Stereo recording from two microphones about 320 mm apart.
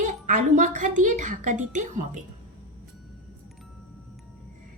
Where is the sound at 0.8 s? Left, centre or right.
Right.